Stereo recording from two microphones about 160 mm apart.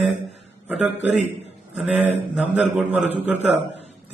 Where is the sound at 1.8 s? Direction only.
10° right (ahead or behind).